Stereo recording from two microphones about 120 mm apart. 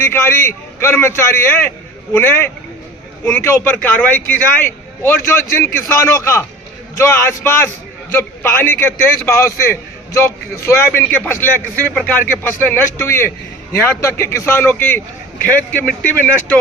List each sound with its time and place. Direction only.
0.0 s a man's voice: 20° left (ahead or behind)